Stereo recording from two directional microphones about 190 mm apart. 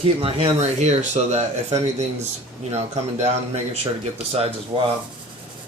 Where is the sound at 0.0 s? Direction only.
30° right (ahead or behind).